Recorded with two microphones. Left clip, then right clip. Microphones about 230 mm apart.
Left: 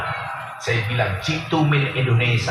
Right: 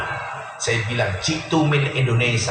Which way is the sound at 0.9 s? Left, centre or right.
Right.